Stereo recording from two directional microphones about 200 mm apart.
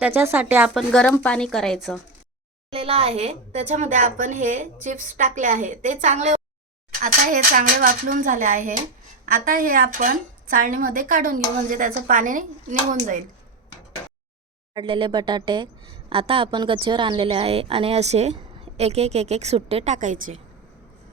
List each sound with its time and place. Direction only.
0.0 s a woman's voice: 10° right (ahead or behind)
2.6 s a woman's voice: 30° right (ahead or behind)
14.8 s speech: 25° right (ahead or behind)